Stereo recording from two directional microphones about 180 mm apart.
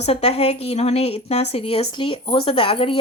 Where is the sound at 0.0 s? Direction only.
35° left (ahead or behind).